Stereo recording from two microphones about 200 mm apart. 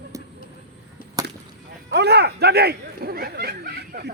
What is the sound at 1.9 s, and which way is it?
Speech, 55° right (ahead or behind).